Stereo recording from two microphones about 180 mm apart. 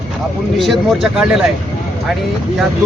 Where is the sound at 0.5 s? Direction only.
Centre (ahead or behind).